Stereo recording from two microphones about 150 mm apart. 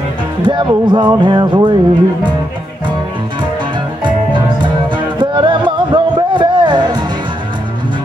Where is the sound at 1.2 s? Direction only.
30° right (ahead or behind).